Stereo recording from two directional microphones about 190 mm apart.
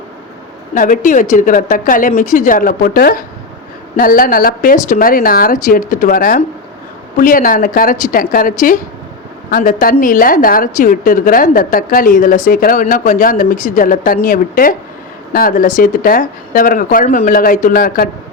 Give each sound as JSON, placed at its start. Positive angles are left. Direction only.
{"t": 0.7, "sound": "a woman's voice", "side_deg": 45}